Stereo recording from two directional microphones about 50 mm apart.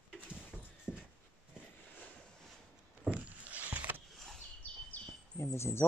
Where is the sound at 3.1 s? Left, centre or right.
Right.